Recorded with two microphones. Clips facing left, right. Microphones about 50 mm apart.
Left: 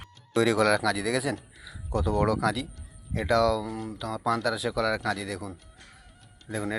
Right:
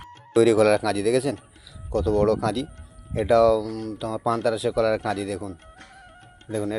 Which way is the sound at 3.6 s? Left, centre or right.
Left.